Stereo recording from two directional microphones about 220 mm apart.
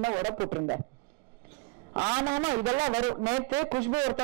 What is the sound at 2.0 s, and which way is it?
Speech, 20° right (ahead or behind).